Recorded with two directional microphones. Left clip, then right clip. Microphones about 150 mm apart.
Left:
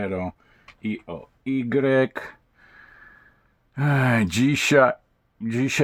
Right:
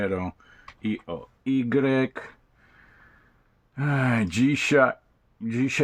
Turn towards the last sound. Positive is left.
turn(degrees=35)  # may be behind; listen again after turning